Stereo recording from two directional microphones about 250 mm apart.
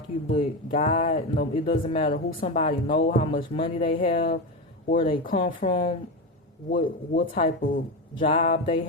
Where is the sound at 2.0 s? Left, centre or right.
Left.